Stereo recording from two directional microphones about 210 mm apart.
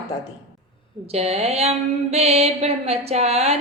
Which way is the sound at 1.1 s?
30° right (ahead or behind).